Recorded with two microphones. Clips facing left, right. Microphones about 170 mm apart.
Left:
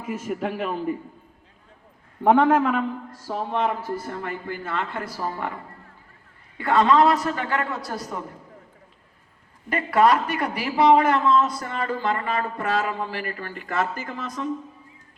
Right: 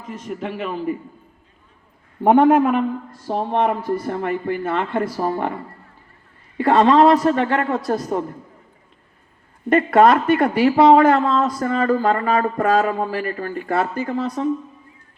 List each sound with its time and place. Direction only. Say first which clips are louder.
0.0 s a man's voice: left 1 dB; 5° left (ahead or behind)
2.2 s a man's voice: right 4 dB; 15° right (ahead or behind)
3.5 s speech: right 5 dB; 60° right (ahead or behind)
4.2 s a man's voice: right 9 dB; 25° right (ahead or behind)
6.6 s a man's voice: right 5 dB; 30° right (ahead or behind)
9.7 s speech: right 6 dB; 55° right (ahead or behind)
11.0 s speech: right 4 dB; 35° right (ahead or behind)